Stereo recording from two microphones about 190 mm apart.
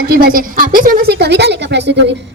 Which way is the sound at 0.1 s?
50° right (ahead or behind).